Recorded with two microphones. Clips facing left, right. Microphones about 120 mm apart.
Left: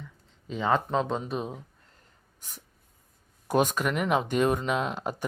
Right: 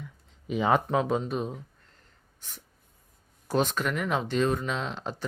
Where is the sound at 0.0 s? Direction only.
15° right (ahead or behind).